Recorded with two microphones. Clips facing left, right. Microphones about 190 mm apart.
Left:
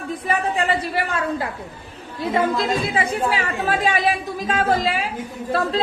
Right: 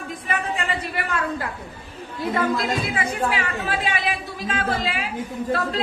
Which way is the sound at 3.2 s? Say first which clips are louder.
Left 3 dB; 40° left (ahead or behind).